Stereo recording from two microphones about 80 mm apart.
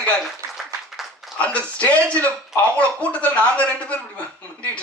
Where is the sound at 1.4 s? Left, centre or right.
Centre.